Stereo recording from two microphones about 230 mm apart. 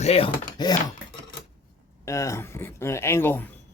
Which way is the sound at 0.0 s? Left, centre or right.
Left.